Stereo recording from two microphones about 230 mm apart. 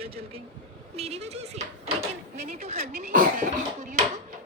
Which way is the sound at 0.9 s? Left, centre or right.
Right.